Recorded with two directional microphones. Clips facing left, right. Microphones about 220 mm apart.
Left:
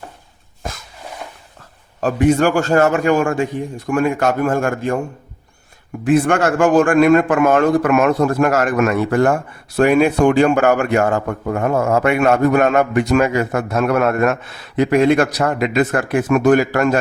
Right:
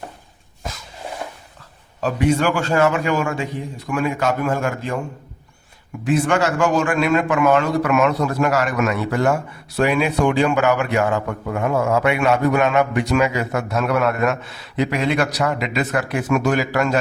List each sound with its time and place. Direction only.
2.0 s speech: 50° left (ahead or behind)
6.1 s speech: 55° left (ahead or behind)